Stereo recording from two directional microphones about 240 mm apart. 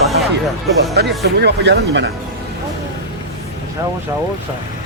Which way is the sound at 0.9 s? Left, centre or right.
Right.